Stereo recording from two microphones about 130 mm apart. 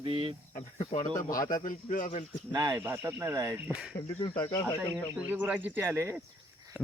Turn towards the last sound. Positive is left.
turn(degrees=-20)  # may be behind; listen again after turning